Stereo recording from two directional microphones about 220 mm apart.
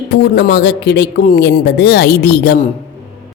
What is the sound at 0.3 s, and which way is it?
Speech, 50° left (ahead or behind).